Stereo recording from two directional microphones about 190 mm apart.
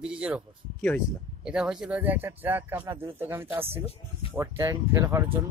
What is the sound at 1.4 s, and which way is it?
Speech, 5° right (ahead or behind).